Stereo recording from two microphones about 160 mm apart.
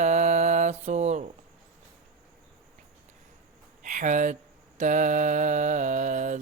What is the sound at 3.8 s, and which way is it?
Speech, 50° right (ahead or behind).